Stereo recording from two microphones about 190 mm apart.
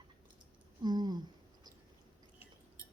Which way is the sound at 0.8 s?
20° right (ahead or behind).